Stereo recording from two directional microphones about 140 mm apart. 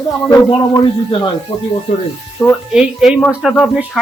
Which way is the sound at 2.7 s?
5° right (ahead or behind).